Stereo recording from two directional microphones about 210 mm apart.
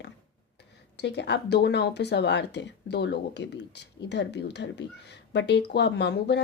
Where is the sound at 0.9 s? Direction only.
55° left (ahead or behind).